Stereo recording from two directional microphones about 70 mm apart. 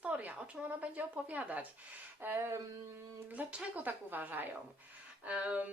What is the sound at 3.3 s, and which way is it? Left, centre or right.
Speech, centre.